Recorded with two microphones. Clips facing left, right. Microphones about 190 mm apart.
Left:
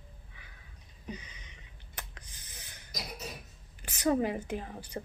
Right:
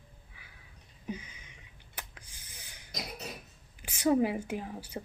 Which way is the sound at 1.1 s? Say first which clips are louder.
Right 3 dB; 10° right (ahead or behind).